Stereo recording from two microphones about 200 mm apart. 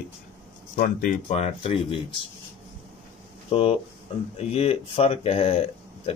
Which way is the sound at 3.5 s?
30° left (ahead or behind).